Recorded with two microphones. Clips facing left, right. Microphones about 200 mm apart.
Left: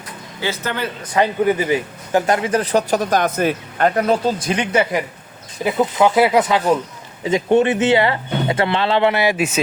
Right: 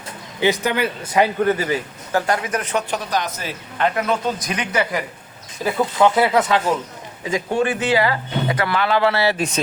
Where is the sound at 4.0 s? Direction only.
35° left (ahead or behind).